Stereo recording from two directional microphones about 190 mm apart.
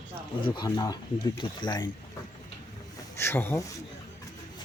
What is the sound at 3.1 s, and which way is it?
Speech, 15° left (ahead or behind).